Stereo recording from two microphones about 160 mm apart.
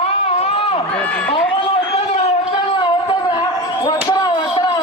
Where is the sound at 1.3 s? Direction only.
35° left (ahead or behind).